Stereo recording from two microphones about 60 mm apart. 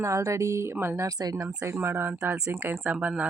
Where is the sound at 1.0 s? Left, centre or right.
Right.